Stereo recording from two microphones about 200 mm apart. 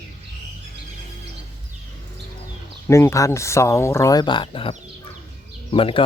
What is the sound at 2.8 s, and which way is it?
Speech, 15° left (ahead or behind).